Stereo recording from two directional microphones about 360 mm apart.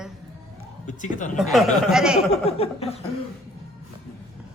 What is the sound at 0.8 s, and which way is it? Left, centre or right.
Speech, left.